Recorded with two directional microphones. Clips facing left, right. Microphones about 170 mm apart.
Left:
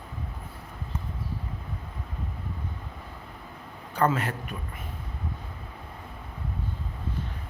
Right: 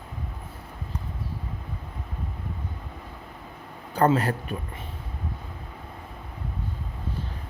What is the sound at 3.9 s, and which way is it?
Speech, 35° right (ahead or behind).